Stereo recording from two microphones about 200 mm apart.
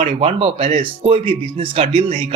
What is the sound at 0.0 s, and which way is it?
Speech, 30° right (ahead or behind).